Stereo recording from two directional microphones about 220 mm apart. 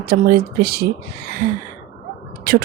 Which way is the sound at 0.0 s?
40° right (ahead or behind).